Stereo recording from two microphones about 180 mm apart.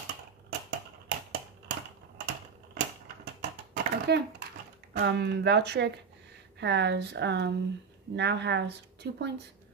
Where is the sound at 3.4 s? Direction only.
65° right (ahead or behind).